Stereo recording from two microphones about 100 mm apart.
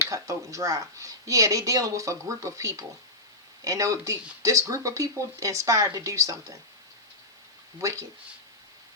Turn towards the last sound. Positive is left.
turn(degrees=-30)  # may be behind; listen again after turning